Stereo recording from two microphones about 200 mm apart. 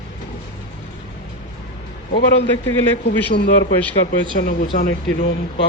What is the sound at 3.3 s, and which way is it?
Speech, 55° left (ahead or behind).